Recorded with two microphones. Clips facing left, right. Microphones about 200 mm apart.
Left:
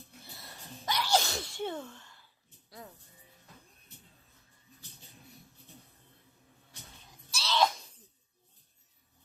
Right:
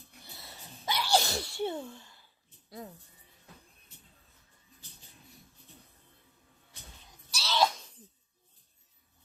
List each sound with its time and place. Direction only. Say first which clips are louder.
0.3 s sneeze: left 2 dB; 5° right (ahead or behind)
2.6 s music: right 5 dB; 25° right (ahead or behind)
7.3 s a sound: even; 5° right (ahead or behind)